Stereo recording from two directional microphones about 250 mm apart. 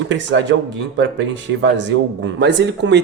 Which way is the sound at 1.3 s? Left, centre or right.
Right.